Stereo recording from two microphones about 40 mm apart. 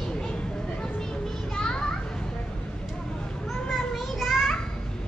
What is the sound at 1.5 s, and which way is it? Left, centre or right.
Children playing, centre.